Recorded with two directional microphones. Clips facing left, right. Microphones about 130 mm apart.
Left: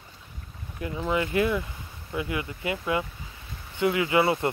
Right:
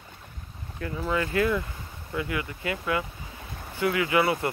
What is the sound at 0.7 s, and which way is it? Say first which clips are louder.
Speech: left 1 dB; 15° left (ahead or behind).